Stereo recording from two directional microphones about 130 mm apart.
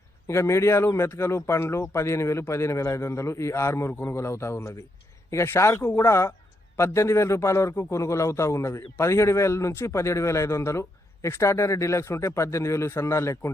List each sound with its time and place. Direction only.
0.3 s a man's voice: 20° left (ahead or behind)